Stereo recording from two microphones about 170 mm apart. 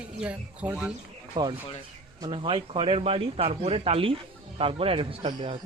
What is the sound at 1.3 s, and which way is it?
A man's voice, 25° right (ahead or behind).